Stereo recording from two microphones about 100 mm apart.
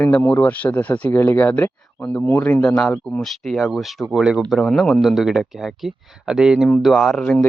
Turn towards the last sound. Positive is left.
turn(degrees=5)  # may be behind; listen again after turning